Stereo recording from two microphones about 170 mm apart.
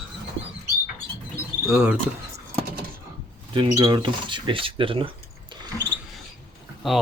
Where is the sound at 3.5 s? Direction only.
30° right (ahead or behind).